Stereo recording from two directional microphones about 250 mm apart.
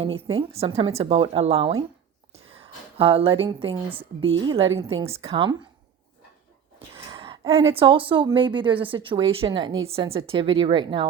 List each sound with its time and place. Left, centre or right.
0.3 s a woman's voice: right
6.9 s a woman's voice: centre